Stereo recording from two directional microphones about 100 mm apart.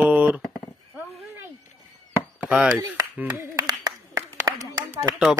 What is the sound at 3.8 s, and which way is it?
Clapping, 35° right (ahead or behind).